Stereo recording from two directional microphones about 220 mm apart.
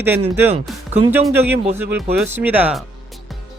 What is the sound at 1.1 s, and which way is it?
A man's voice, 10° right (ahead or behind).